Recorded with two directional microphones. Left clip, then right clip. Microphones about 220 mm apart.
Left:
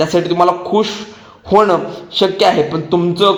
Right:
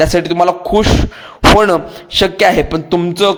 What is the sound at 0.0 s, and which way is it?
A man's voice, 30° right (ahead or behind).